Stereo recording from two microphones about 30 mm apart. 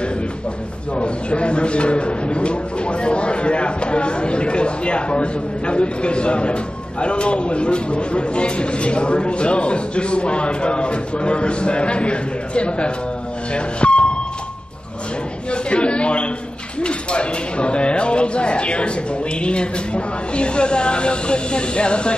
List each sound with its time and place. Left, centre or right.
0.9 s speech: left
13.7 s a sound: left
15.5 s chatter: left
16.8 s speech: left